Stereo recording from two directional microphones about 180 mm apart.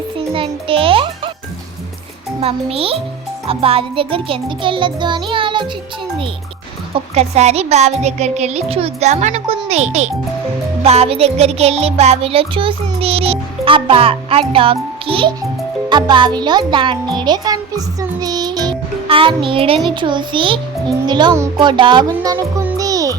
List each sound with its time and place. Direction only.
0.3 s music: 30° right (ahead or behind)
2.4 s music: 30° right (ahead or behind)
3.4 s a child's voice: 30° right (ahead or behind)
6.9 s music: 35° right (ahead or behind)
9.6 s a child's voice: 35° right (ahead or behind)
10.8 s music: 35° right (ahead or behind)
15.9 s a child's voice: 25° right (ahead or behind)